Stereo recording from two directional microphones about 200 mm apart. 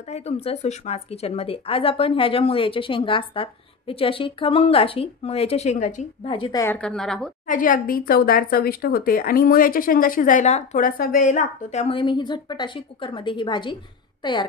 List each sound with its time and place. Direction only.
0.1 s a woman's voice: 35° left (ahead or behind)
6.2 s a woman's voice: 25° left (ahead or behind)
6.6 s a woman's voice: 5° left (ahead or behind)
7.4 s a woman's voice: 40° left (ahead or behind); by 13.7 s 25° left (ahead or behind)